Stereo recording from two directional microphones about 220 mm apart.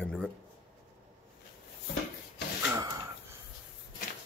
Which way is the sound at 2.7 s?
15° right (ahead or behind).